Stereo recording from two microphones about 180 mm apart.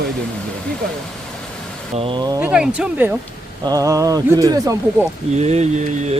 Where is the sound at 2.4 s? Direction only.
5° right (ahead or behind).